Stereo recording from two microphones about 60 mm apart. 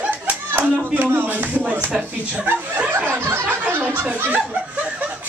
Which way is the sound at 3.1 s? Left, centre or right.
Right.